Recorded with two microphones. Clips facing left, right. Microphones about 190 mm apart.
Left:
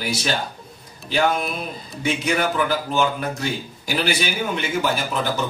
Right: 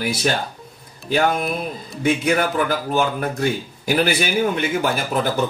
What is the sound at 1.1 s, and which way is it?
Speech, 50° right (ahead or behind).